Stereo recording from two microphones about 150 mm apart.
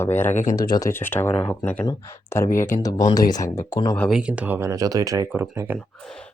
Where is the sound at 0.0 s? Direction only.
15° left (ahead or behind).